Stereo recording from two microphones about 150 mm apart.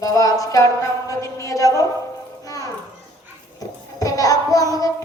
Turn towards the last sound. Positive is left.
turn(degrees=25)  # may be behind; listen again after turning